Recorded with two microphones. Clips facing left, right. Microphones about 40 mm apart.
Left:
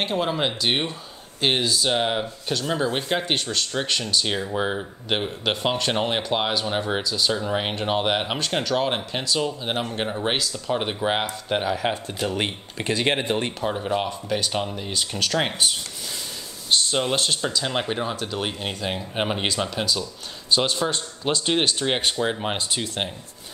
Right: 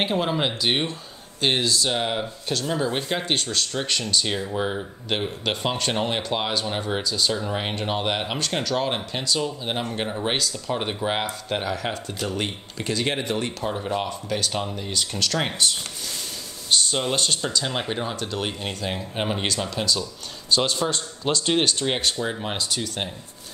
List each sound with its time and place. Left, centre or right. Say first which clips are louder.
0.0 s speech: even; centre; by 13.5 s left
13.6 s speech: left 2 dB; centre
16.7 s speech: left 1 dB; centre